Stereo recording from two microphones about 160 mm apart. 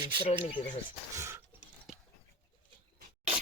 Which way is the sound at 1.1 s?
20° right (ahead or behind).